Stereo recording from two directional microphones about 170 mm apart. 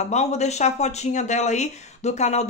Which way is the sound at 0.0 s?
40° left (ahead or behind).